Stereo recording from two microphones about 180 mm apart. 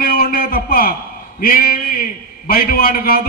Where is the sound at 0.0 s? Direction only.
55° left (ahead or behind).